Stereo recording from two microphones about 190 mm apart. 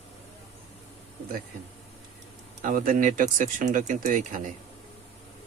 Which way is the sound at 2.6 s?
45° right (ahead or behind).